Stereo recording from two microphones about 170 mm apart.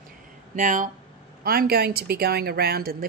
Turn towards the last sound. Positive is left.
turn(degrees=-65)  # may be behind; listen again after turning